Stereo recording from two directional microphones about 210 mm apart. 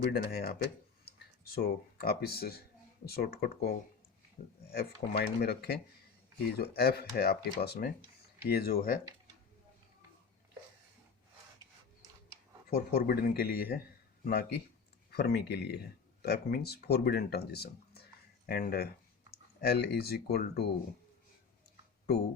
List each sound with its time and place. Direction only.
0.0 s speech: 50° left (ahead or behind)
12.7 s speech: 45° left (ahead or behind)